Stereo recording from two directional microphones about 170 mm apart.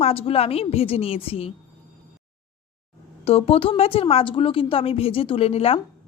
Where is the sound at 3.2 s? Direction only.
35° left (ahead or behind).